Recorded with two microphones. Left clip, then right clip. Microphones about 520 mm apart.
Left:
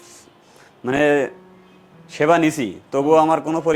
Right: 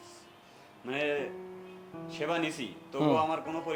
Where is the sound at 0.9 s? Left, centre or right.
Left.